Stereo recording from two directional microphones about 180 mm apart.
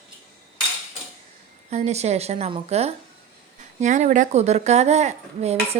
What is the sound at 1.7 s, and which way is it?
Speech, 35° right (ahead or behind).